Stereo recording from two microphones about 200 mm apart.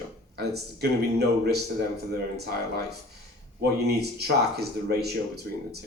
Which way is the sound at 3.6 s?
55° right (ahead or behind).